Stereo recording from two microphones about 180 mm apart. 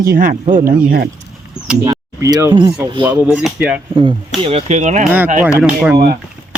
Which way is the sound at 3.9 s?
30° right (ahead or behind).